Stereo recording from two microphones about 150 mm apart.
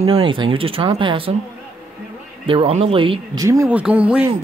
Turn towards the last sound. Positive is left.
turn(degrees=-10)  # may be behind; listen again after turning